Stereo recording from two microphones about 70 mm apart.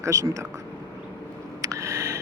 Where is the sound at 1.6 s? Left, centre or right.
Right.